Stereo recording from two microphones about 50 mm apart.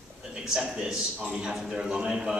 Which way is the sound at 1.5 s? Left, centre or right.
Centre.